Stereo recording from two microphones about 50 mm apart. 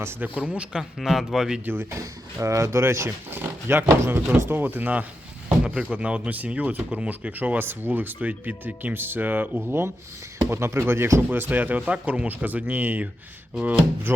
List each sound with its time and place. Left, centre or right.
0.2 s a man's voice: right
0.8 s speech: centre
1.6 s speech: right
1.9 s speech: right
3.2 s speech: right
3.8 s speech: right
4.4 s speech: right
5.5 s a sound: centre
5.9 s speech: right
7.6 s speech: right
9.6 s speech: right
11.3 s speech: right